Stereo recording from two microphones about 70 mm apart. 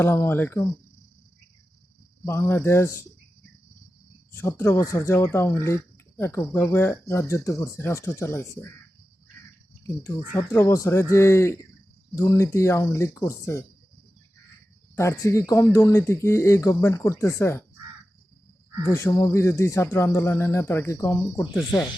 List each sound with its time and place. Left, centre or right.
0.0 s speech: left
2.2 s speech: left
4.3 s speech: left
9.8 s speech: left
14.9 s speech: left
18.8 s speech: left